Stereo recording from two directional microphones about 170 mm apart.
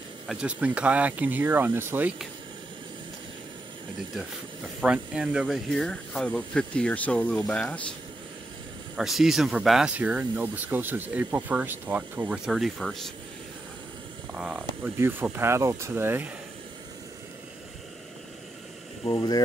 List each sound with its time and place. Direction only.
0.3 s speech: 5° right (ahead or behind)
4.8 s speech: 5° right (ahead or behind)
8.9 s speech: centre (ahead or behind)
14.3 s speech: 5° right (ahead or behind)
19.0 s speech: 20° left (ahead or behind)